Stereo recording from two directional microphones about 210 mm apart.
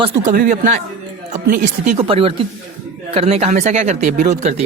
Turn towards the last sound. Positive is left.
turn(degrees=-35)  # may be behind; listen again after turning